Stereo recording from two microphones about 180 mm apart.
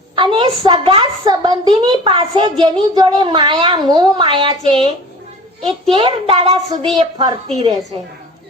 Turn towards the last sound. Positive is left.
turn(degrees=-35)  # may be behind; listen again after turning